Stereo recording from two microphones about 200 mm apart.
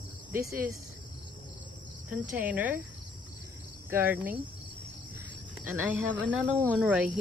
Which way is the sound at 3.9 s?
10° right (ahead or behind).